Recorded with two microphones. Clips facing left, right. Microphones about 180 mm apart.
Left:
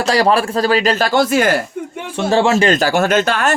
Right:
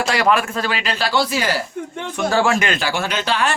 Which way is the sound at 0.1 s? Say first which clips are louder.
Left 6 dB; 35° left (ahead or behind).